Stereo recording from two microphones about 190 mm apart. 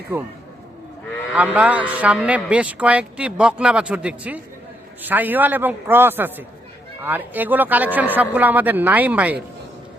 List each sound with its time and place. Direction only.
0.1 s a man's voice: 15° right (ahead or behind)
1.5 s a man's voice: 5° right (ahead or behind)